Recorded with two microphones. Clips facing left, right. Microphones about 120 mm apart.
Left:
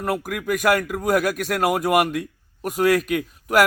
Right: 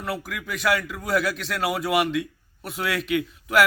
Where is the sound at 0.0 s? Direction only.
45° left (ahead or behind).